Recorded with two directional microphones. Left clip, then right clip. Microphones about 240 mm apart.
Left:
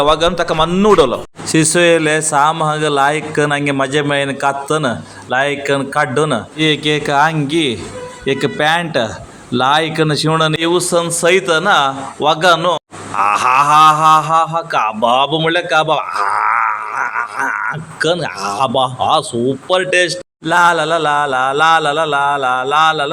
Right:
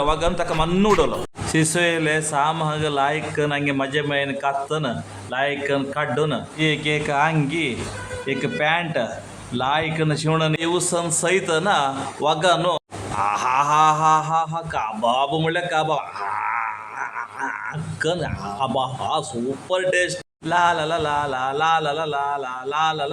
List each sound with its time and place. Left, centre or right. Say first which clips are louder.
0.0 s speech: left 8 dB; centre